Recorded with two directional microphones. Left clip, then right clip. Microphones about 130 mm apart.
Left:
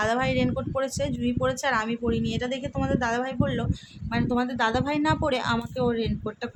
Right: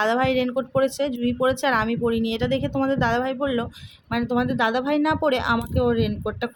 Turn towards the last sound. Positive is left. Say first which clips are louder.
# right 5 dB
turn(degrees=-35)  # may be behind; listen again after turning